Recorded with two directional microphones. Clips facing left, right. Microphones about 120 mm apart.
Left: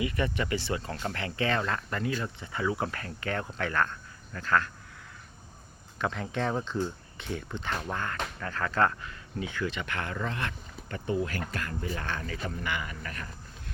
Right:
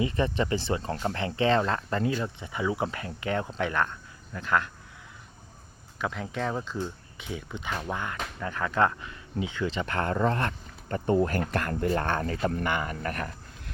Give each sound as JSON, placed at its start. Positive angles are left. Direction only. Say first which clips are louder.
{"t": 0.0, "sound": "speech", "louder": "right 3 dB", "side_deg": -30}
{"t": 6.0, "sound": "speech", "louder": "even", "side_deg": -5}